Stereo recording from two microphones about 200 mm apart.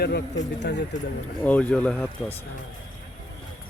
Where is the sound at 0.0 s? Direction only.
55° left (ahead or behind).